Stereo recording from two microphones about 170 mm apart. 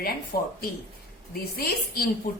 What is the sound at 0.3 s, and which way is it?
Speech, 60° left (ahead or behind).